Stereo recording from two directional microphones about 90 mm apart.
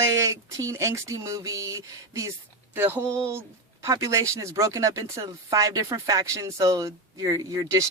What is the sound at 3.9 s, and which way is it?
Speech, 35° right (ahead or behind).